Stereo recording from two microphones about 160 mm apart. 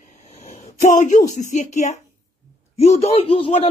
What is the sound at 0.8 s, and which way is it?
A woman's voice, 50° left (ahead or behind).